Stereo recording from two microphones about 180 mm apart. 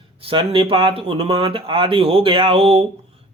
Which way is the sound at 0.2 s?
30° right (ahead or behind).